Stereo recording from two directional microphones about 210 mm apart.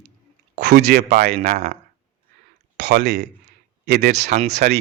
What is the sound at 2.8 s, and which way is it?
Speech, 55° right (ahead or behind).